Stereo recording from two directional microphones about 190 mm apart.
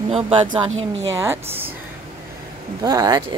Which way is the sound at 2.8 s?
20° right (ahead or behind).